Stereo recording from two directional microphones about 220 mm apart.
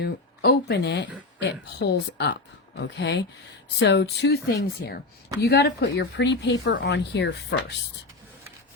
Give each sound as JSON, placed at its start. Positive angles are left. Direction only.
{"t": 0.0, "sound": "speech", "side_deg": 50}